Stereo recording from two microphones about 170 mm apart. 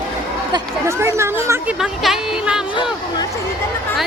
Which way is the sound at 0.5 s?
15° right (ahead or behind).